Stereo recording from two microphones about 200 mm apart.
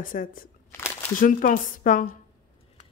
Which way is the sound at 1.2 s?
45° left (ahead or behind).